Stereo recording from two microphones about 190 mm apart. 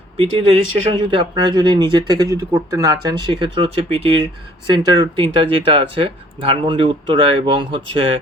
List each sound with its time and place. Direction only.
0.2 s speech: 30° right (ahead or behind)